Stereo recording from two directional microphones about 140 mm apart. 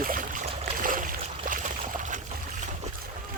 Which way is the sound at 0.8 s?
75° right (ahead or behind).